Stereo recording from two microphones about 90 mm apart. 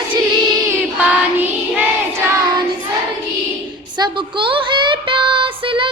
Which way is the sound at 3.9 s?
60° right (ahead or behind).